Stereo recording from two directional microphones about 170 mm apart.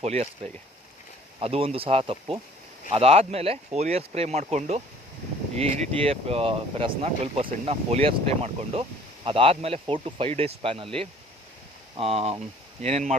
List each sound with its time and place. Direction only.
0.0 s speech: 40° right (ahead or behind)
1.4 s speech: 35° right (ahead or behind)
11.9 s speech: 35° right (ahead or behind)